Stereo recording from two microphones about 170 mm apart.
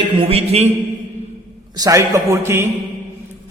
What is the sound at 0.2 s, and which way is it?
Speech, 35° right (ahead or behind).